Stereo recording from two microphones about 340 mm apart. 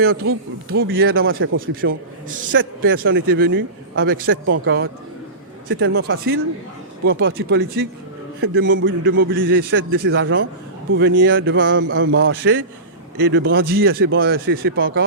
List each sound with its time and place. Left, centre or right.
0.0 s a man's voice: right
5.6 s a man's voice: right